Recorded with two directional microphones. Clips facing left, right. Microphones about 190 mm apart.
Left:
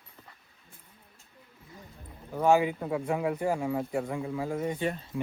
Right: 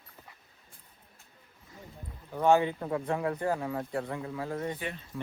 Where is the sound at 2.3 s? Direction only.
Centre (ahead or behind).